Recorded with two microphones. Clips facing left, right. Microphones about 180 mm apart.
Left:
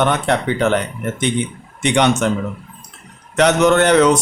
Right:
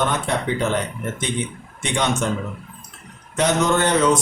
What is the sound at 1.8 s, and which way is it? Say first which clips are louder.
Speech: left 7 dB; 70° left (ahead or behind).